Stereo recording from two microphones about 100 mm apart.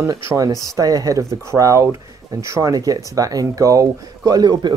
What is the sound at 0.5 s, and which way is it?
Speech, 40° left (ahead or behind).